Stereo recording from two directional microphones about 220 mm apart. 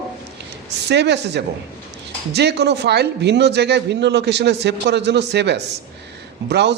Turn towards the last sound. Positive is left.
turn(degrees=-50)  # may be behind; listen again after turning